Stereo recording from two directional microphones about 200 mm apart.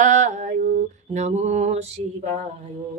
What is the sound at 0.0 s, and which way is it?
Mantra, 40° right (ahead or behind).